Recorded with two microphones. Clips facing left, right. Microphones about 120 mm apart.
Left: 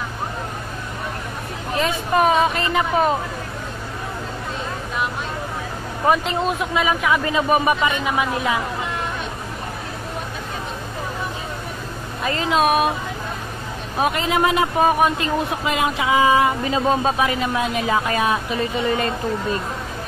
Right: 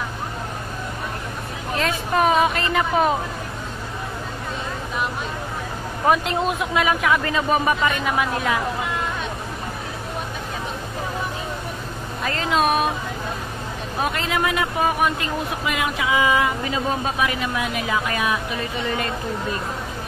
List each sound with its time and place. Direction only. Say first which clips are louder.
1.8 s speech: left 2 dB; centre (ahead or behind)
6.0 s speech: left 1 dB; centre (ahead or behind)
7.2 s speech: left 2 dB; 10° left (ahead or behind)
12.3 s speech: left 2 dB; 5° left (ahead or behind)
14.1 s speech: left 5 dB; 20° left (ahead or behind)